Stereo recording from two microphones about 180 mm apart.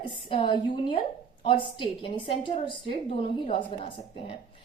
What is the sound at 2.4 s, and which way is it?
A woman's voice, 30° left (ahead or behind).